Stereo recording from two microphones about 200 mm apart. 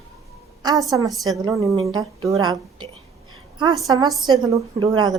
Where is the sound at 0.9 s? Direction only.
20° right (ahead or behind).